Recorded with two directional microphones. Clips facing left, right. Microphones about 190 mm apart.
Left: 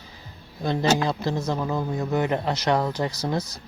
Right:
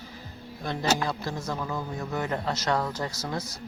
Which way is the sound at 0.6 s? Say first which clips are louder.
Left 5 dB; 25° left (ahead or behind).